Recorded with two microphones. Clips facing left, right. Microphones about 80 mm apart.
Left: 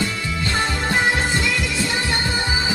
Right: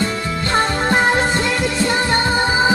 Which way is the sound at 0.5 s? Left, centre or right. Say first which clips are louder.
Right 6 dB; right.